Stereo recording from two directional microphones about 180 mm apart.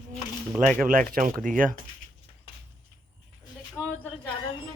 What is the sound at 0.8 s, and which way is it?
Speech, 50° right (ahead or behind).